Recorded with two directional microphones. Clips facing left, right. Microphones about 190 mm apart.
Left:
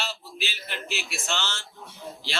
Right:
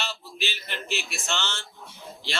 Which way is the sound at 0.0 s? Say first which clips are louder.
Right 1 dB; 5° left (ahead or behind).